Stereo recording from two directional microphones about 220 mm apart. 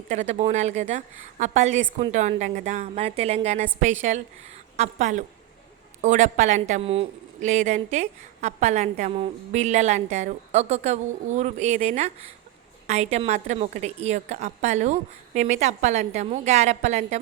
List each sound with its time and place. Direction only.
0.1 s a woman's voice: 30° right (ahead or behind)